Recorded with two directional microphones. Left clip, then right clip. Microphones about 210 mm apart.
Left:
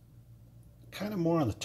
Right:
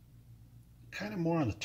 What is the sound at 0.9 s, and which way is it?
Speech, 10° left (ahead or behind).